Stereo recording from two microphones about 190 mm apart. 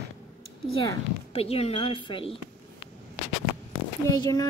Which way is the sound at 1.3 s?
30° left (ahead or behind).